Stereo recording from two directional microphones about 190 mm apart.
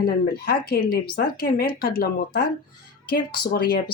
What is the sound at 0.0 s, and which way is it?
Speech, 55° left (ahead or behind).